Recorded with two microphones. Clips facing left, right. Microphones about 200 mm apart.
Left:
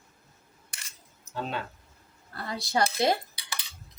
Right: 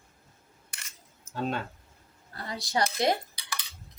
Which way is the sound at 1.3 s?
50° right (ahead or behind).